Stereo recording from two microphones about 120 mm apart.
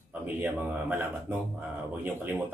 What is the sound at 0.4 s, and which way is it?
Speech, 15° right (ahead or behind).